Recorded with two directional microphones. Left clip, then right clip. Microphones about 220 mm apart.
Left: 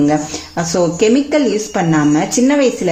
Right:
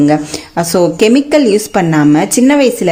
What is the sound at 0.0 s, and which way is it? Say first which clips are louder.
Speech: right 4 dB; 45° right (ahead or behind).